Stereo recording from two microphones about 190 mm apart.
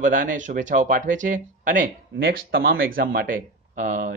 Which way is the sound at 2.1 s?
65° right (ahead or behind).